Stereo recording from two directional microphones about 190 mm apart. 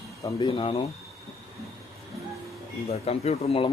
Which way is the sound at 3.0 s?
35° left (ahead or behind).